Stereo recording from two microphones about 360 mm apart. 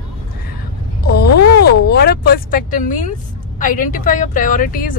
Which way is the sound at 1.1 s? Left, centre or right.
Left.